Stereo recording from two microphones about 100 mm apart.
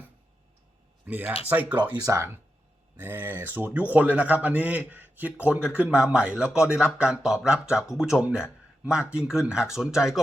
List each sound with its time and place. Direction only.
1.0 s speech: 15° right (ahead or behind)
2.0 s speech: 30° right (ahead or behind)
3.0 s speech: 20° right (ahead or behind); by 10.2 s 5° right (ahead or behind)